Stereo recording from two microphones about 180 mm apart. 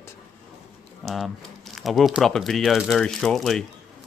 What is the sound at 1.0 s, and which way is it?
Speech, centre (ahead or behind).